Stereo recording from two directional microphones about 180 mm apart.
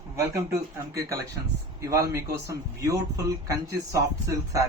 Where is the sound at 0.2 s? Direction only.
15° right (ahead or behind).